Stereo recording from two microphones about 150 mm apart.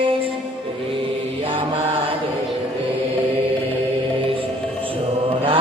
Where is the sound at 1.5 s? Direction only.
35° right (ahead or behind).